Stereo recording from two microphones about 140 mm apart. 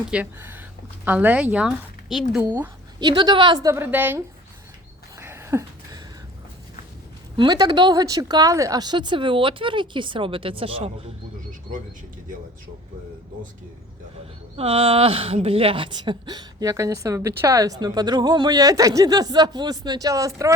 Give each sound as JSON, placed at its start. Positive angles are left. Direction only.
{"t": 0.1, "sound": "a woman's voice", "side_deg": -10}
{"t": 3.0, "sound": "speech", "side_deg": -35}
{"t": 3.8, "sound": "a woman's voice", "side_deg": -15}
{"t": 5.2, "sound": "a sound", "side_deg": -20}
{"t": 7.3, "sound": "speech", "side_deg": -30}
{"t": 14.5, "sound": "a woman's voice", "side_deg": -40}